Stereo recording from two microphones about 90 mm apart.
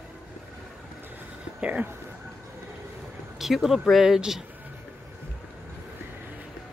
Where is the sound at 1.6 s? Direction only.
15° right (ahead or behind).